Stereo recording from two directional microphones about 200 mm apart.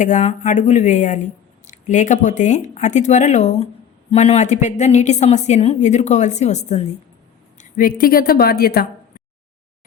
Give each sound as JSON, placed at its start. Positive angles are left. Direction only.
{"t": 0.0, "sound": "speech", "side_deg": 35}
{"t": 7.6, "sound": "a woman's voice", "side_deg": 45}